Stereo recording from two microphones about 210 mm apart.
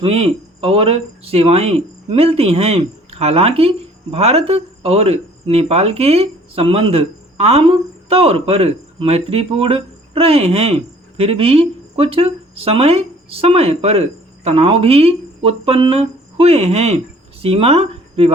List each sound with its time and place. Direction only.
0.0 s speech: 30° right (ahead or behind)